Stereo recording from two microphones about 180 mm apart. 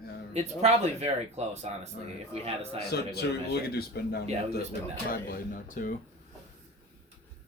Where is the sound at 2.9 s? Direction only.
60° left (ahead or behind).